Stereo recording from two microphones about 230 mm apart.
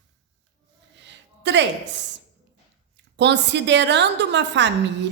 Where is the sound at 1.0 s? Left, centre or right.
Right.